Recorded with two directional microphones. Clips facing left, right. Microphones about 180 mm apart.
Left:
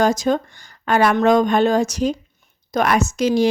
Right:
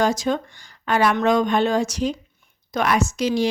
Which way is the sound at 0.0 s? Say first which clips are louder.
Left 3 dB; 45° left (ahead or behind).